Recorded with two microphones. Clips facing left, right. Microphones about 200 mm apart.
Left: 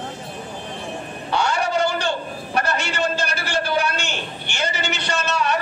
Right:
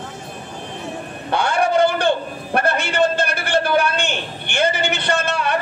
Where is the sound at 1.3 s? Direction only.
55° right (ahead or behind).